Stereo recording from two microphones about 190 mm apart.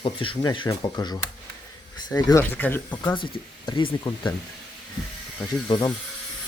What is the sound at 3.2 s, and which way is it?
Speech, 25° left (ahead or behind).